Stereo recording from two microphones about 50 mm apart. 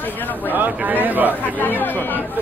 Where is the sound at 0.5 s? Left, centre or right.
Right.